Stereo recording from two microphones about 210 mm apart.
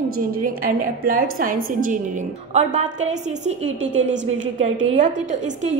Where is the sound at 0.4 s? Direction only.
45° right (ahead or behind).